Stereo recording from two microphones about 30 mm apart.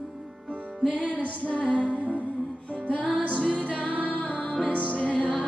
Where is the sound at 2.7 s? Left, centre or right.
Left.